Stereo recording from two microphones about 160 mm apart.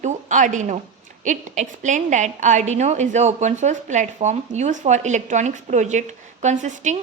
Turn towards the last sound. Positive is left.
turn(degrees=-50)  # may be behind; listen again after turning